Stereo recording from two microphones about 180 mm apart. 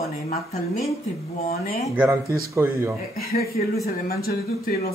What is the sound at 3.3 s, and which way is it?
A woman's voice, 60° left (ahead or behind).